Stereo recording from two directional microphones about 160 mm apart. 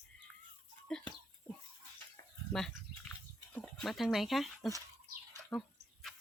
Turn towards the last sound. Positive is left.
turn(degrees=0)  # may be behind; listen again after turning